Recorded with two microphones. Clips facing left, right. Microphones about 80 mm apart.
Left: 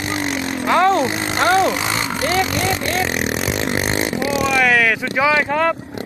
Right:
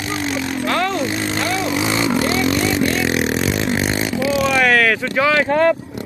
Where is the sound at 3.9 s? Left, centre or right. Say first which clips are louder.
Even; left.